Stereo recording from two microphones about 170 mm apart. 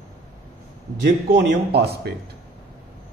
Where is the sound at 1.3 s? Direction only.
75° right (ahead or behind).